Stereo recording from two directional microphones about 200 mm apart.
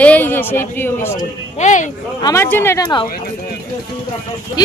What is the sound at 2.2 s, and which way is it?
Speech, 15° left (ahead or behind).